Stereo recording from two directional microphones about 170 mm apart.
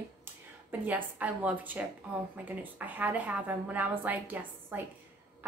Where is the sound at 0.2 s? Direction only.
10° right (ahead or behind).